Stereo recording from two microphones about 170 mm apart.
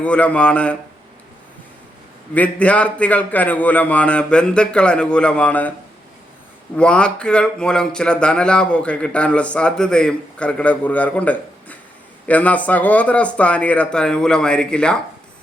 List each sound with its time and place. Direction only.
0.0 s a man's voice: 10° left (ahead or behind)
2.3 s a man's voice: 10° left (ahead or behind)
6.7 s a man's voice: 5° left (ahead or behind)